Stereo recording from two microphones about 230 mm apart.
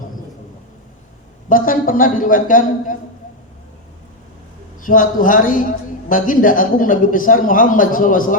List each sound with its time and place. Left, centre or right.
1.5 s speech: left
4.9 s speech: left